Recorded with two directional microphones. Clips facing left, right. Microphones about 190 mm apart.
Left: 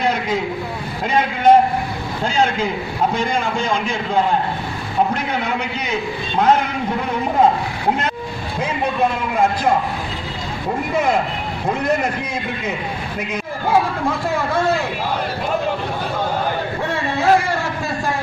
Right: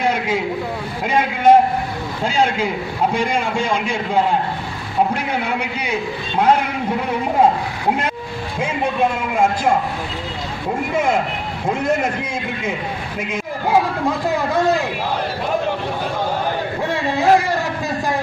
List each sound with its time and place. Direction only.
1.0 s a man's voice: 10° right (ahead or behind)
9.3 s a man's voice: 10° right (ahead or behind)
11.6 s a man's voice: 5° right (ahead or behind)
14.3 s a man's voice: 15° right (ahead or behind)
16.9 s a sound: 15° right (ahead or behind)